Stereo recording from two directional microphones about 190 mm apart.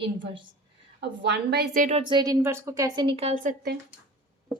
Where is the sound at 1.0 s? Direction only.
65° right (ahead or behind); by 2.0 s 40° right (ahead or behind).